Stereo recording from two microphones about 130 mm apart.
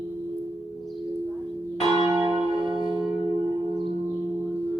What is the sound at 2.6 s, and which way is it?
Singing bowl, 40° right (ahead or behind).